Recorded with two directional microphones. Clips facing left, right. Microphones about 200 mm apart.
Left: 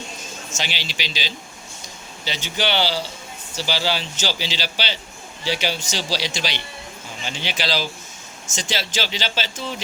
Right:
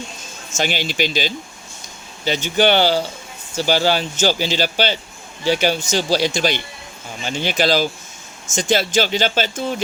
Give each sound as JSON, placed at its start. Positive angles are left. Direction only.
{"t": 0.5, "sound": "speech", "side_deg": -50}